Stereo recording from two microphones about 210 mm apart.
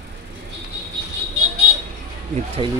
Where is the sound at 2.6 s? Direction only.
25° right (ahead or behind).